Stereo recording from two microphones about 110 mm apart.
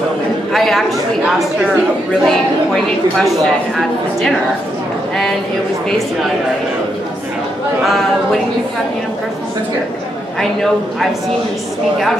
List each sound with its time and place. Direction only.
0.5 s speech: centre (ahead or behind)
2.2 s a woman's voice: 5° left (ahead or behind)